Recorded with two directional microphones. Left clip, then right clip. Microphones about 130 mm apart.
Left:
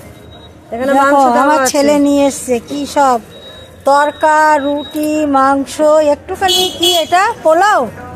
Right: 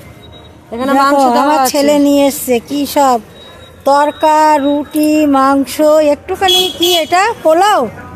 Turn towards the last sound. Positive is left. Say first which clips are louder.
# even
turn(degrees=-45)  # may be behind; listen again after turning